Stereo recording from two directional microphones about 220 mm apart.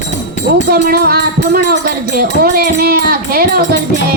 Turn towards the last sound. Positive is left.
turn(degrees=-45)  # may be behind; listen again after turning